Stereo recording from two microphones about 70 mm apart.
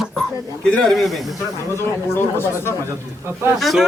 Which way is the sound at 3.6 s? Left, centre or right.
Centre.